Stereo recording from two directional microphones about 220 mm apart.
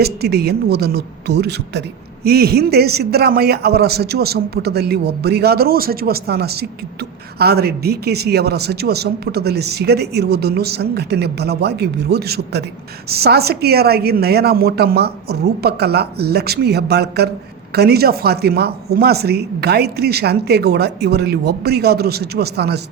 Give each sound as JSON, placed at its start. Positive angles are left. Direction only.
{"t": 0.0, "sound": "speech", "side_deg": -45}